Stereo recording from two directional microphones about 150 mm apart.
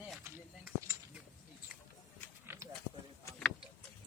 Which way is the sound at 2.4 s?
15° right (ahead or behind).